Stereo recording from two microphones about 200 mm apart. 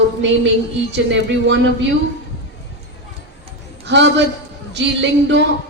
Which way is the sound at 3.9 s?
60° right (ahead or behind).